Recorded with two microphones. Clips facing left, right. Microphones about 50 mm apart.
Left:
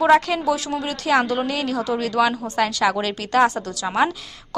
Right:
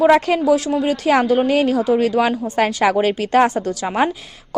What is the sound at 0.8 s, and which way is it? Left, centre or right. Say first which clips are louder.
A woman's voice: right 3 dB; centre.